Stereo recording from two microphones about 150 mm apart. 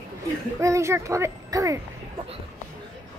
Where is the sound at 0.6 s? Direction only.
20° right (ahead or behind).